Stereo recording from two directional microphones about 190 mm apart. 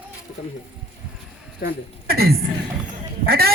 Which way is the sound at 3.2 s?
55° right (ahead or behind).